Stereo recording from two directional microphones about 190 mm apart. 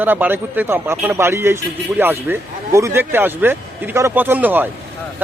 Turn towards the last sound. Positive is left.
turn(degrees=-10)  # may be behind; listen again after turning